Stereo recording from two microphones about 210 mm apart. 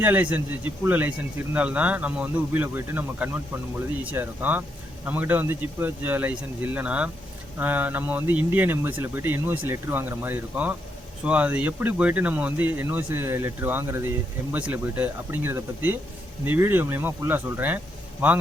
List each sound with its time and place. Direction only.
0.0 s speech: 10° right (ahead or behind)